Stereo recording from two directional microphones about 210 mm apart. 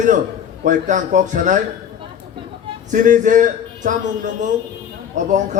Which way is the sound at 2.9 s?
40° right (ahead or behind).